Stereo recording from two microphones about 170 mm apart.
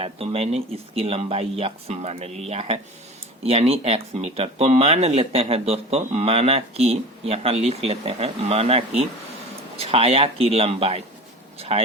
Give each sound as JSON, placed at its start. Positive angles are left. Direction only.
{"t": 0.0, "sound": "speech", "side_deg": -35}